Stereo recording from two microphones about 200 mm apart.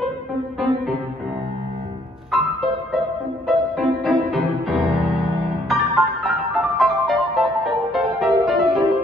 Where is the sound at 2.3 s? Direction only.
Centre (ahead or behind).